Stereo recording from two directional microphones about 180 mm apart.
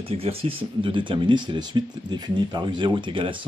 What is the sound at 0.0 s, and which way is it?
Speech, 35° right (ahead or behind).